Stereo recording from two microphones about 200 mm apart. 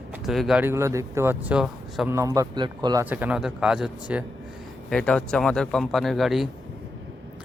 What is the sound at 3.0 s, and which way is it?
Speech, 10° right (ahead or behind).